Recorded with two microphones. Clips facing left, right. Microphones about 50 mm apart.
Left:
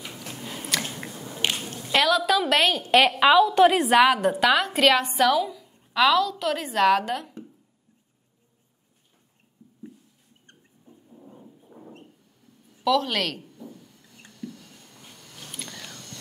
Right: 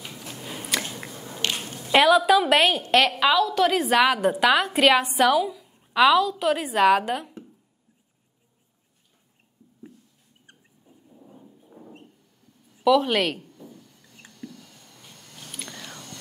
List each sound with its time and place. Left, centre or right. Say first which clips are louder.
0.3 s biting: right 1 dB; centre
1.6 s a woman's voice: right 6 dB; centre
2.8 s a woman's voice: left 1 dB; centre
3.2 s a woman's voice: left 4 dB; centre
3.7 s a woman's voice: left 2 dB; centre
10.4 s rodents: left 1 dB; centre
11.1 s a sound: left 1 dB; centre
12.7 s speech: right 4 dB; centre
13.4 s a sound: left 2 dB; centre
15.1 s a sound: even; right
15.7 s whispering: right 1 dB; right